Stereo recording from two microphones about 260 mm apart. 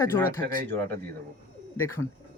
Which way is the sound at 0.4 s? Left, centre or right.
Right.